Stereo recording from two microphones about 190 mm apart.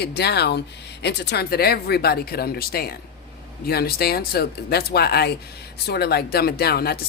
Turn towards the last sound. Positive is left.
turn(degrees=55)  # may be behind; listen again after turning